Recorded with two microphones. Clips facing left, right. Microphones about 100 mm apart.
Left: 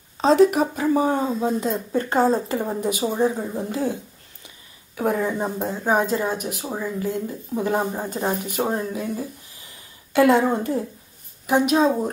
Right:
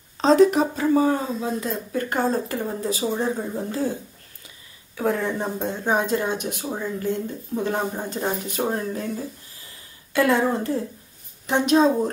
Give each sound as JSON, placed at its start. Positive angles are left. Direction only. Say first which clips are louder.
{"t": 0.2, "sound": "speech", "louder": "even", "side_deg": 5}
{"t": 0.9, "sound": "speech", "louder": "right 1 dB", "side_deg": 20}
{"t": 4.9, "sound": "speech", "louder": "left 1 dB", "side_deg": 15}